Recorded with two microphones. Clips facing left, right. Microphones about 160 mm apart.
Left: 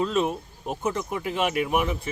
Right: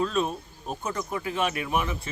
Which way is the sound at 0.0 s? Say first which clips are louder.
Left 2 dB; 20° left (ahead or behind).